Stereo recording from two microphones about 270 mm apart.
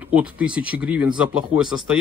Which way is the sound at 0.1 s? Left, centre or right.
Centre.